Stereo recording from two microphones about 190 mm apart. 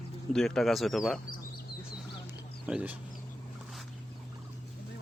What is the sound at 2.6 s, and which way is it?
Speech, 5° right (ahead or behind).